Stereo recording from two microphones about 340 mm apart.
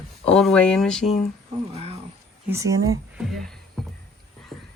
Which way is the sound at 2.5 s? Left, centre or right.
Centre.